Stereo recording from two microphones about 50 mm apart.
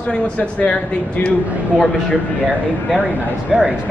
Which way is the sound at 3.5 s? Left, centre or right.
Centre.